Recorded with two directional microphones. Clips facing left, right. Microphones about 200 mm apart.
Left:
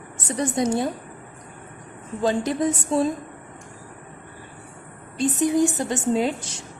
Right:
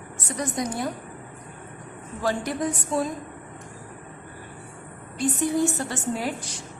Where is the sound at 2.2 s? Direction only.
20° left (ahead or behind).